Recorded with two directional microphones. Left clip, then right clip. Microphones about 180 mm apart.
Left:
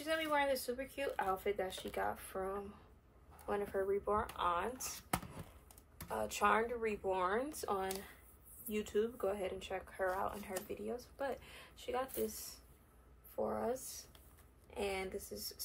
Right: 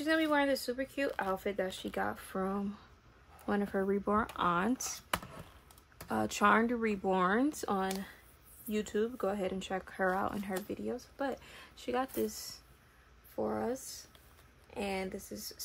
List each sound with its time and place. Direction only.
0.0 s speech: 55° right (ahead or behind)
6.1 s speech: 50° right (ahead or behind)
11.1 s speech: 45° right (ahead or behind)
13.5 s speech: 55° right (ahead or behind)